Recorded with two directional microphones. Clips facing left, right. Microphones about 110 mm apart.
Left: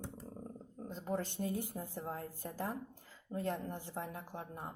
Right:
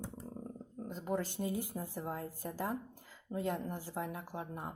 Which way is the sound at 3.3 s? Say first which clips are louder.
Right 2 dB; 10° right (ahead or behind).